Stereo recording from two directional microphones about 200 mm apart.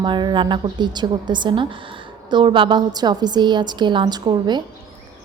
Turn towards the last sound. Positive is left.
turn(degrees=-20)  # may be behind; listen again after turning